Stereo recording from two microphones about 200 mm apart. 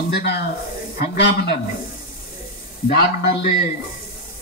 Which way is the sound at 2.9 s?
50° left (ahead or behind).